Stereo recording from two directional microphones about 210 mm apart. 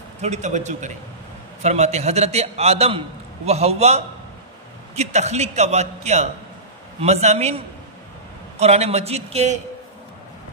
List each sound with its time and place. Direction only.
0.2 s a man's voice: 35° right (ahead or behind)